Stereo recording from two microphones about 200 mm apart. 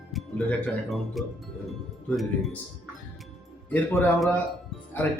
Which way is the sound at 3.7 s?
10° left (ahead or behind).